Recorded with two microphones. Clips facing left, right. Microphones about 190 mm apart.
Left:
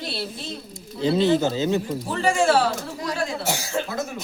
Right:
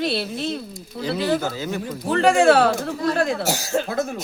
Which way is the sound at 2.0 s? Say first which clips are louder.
Right 7 dB; 65° right (ahead or behind).